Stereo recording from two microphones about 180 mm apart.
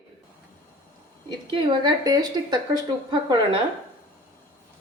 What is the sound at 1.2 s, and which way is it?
A woman's voice, 30° right (ahead or behind).